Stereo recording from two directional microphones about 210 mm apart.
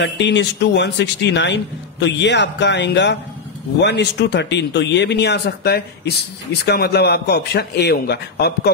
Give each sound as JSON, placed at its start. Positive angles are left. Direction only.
{"t": 0.0, "sound": "a man's voice", "side_deg": 55}